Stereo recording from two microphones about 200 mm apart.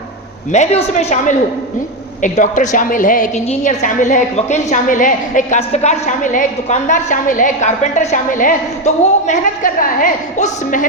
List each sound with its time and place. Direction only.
0.5 s a woman's voice: 35° left (ahead or behind)